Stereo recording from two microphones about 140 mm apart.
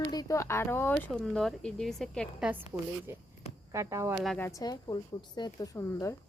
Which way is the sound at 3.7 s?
20° right (ahead or behind).